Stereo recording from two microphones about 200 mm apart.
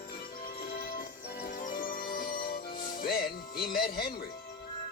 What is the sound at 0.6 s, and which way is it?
Music, 50° left (ahead or behind).